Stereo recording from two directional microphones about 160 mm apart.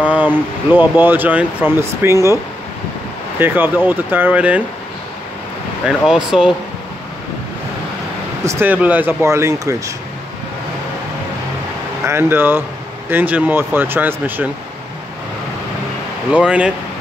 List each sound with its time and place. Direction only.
0.0 s speech: 10° right (ahead or behind)
3.3 s speech: 10° right (ahead or behind)
5.9 s speech: 5° right (ahead or behind)
8.5 s speech: 15° right (ahead or behind)
12.0 s speech: 15° right (ahead or behind)
16.3 s speech: 10° right (ahead or behind)